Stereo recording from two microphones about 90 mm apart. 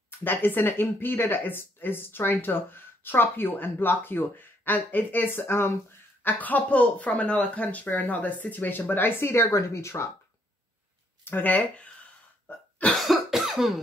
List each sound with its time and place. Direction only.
0.2 s speech: 25° left (ahead or behind)
11.2 s speech: 20° left (ahead or behind)
12.4 s cough: 15° left (ahead or behind)
12.9 s cough: centre (ahead or behind)